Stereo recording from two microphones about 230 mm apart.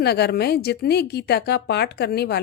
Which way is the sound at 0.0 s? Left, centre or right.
Left.